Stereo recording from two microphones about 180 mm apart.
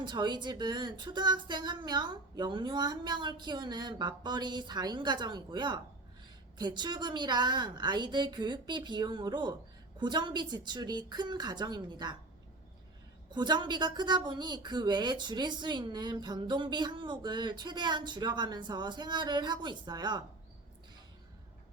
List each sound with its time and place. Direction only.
0.0 s a woman's voice: 25° right (ahead or behind)
13.3 s a woman's voice: 25° right (ahead or behind)